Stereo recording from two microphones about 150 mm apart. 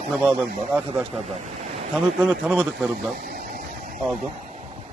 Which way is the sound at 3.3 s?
80° right.